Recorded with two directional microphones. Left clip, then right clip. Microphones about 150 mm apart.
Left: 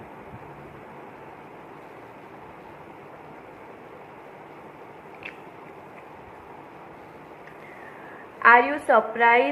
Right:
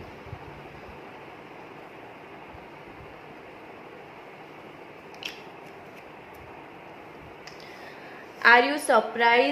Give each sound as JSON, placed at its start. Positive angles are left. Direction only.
{"t": 8.4, "sound": "a woman's voice", "side_deg": -30}